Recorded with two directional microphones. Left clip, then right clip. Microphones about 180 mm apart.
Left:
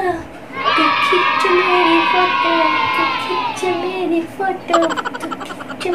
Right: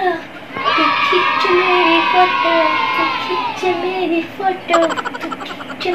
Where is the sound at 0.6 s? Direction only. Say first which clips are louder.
Even; centre (ahead or behind).